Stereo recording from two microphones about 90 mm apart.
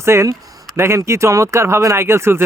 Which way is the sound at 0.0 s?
30° right (ahead or behind).